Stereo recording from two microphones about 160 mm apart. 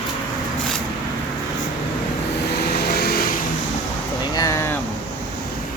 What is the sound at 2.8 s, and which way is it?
Vehicle, 80° left.